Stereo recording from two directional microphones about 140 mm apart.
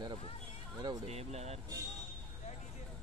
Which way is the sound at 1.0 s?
50° right (ahead or behind).